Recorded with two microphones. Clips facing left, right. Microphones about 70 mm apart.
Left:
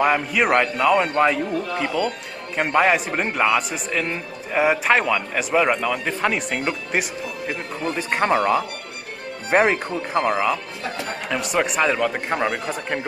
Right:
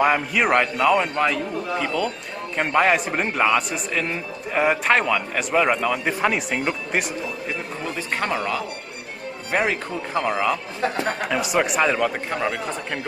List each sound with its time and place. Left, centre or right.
0.0 s a man's voice: centre
8.3 s speech: left
9.8 s a man's voice: centre
12.4 s speech: centre